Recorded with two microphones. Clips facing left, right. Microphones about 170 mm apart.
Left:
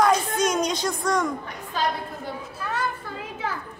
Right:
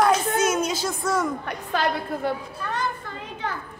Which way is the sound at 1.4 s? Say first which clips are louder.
Right 2 dB; 70° right (ahead or behind).